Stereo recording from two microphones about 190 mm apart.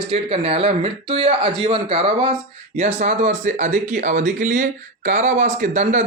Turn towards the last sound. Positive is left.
turn(degrees=-40)  # may be behind; listen again after turning